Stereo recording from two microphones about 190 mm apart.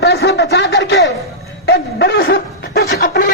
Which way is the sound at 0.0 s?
60° left (ahead or behind).